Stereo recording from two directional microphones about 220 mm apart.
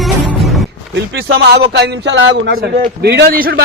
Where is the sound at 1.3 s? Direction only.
50° right (ahead or behind).